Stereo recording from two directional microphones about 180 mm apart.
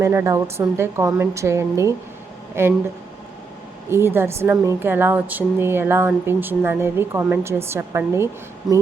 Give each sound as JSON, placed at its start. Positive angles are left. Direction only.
{"t": 0.0, "sound": "a woman's voice", "side_deg": -15}
{"t": 3.8, "sound": "a woman's voice", "side_deg": -15}
{"t": 8.7, "sound": "a sound", "side_deg": 0}